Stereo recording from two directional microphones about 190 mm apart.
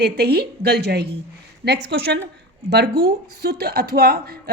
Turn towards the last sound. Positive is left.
turn(degrees=-50)  # may be behind; listen again after turning